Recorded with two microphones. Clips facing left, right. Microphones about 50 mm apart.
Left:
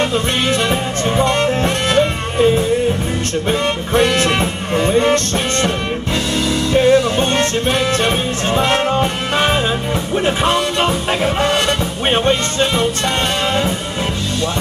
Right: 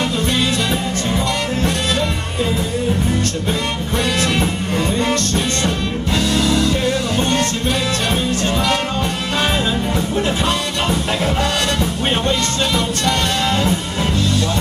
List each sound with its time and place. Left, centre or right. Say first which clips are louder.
1.6 s music: left 4 dB; left
3.9 s music: left 5 dB; left
12.1 s music: left 6 dB; left